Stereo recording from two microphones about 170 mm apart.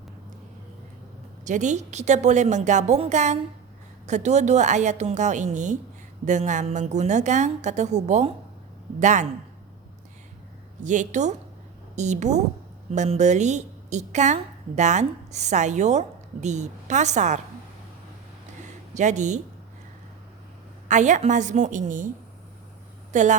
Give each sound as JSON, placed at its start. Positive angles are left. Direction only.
{"t": 1.5, "sound": "a woman's voice", "side_deg": -45}
{"t": 10.8, "sound": "a woman's voice", "side_deg": -45}
{"t": 18.9, "sound": "a woman's voice", "side_deg": -45}
{"t": 20.8, "sound": "a woman's voice", "side_deg": -45}
{"t": 23.1, "sound": "a woman's voice", "side_deg": -45}